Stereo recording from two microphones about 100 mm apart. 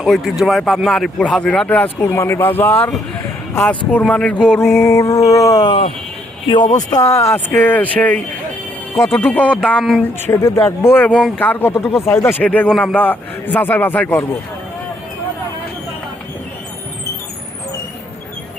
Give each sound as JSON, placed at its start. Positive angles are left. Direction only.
{"t": 0.0, "sound": "a man's voice", "side_deg": 0}
{"t": 4.9, "sound": "a sound", "side_deg": 35}
{"t": 5.6, "sound": "speech", "side_deg": 65}
{"t": 6.5, "sound": "speech", "side_deg": 50}
{"t": 7.0, "sound": "a sound", "side_deg": 30}
{"t": 7.3, "sound": "a man's voice", "side_deg": 20}
{"t": 10.2, "sound": "a sound", "side_deg": 30}
{"t": 10.9, "sound": "a man's voice", "side_deg": 15}
{"t": 12.4, "sound": "a man's voice", "side_deg": 15}